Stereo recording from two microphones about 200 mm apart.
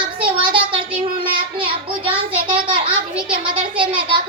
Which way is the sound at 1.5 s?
25° right (ahead or behind).